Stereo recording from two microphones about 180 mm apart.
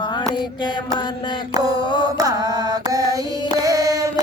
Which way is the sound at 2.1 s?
20° right (ahead or behind).